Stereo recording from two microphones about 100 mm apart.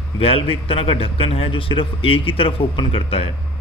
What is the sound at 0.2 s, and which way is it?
A man's voice, 70° left (ahead or behind).